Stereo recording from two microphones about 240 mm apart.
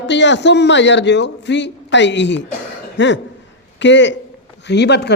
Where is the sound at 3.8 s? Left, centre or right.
Left.